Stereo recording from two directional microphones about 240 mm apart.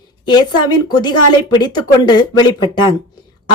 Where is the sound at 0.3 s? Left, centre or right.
Centre.